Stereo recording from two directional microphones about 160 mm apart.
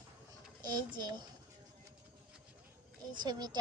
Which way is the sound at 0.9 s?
25° right (ahead or behind).